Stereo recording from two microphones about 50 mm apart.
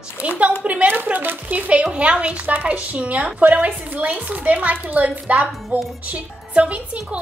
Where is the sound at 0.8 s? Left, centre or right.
Right.